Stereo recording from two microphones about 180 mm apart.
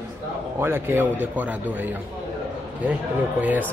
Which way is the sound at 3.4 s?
10° right (ahead or behind).